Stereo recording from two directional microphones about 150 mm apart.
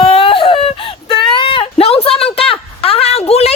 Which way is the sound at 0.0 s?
40° left (ahead or behind).